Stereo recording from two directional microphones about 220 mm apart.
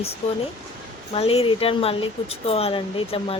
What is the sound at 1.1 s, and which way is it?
Speech, 25° left (ahead or behind).